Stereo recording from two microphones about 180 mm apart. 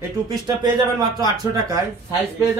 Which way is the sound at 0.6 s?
25° right (ahead or behind).